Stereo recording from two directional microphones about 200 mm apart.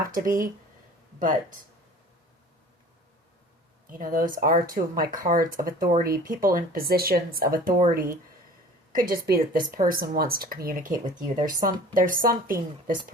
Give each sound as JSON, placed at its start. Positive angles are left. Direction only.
{"t": 0.1, "sound": "speech", "side_deg": -45}
{"t": 3.9, "sound": "speech", "side_deg": -45}